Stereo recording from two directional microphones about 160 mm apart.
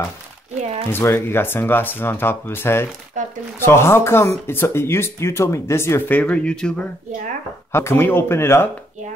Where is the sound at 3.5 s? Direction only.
15° left (ahead or behind).